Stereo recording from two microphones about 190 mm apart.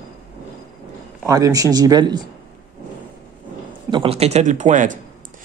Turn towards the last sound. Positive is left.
turn(degrees=-40)  # may be behind; listen again after turning